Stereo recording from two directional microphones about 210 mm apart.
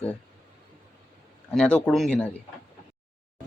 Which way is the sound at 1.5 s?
5° left (ahead or behind).